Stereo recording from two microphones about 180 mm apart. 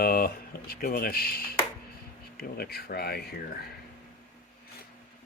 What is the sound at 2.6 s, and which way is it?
Speech, 60° left (ahead or behind).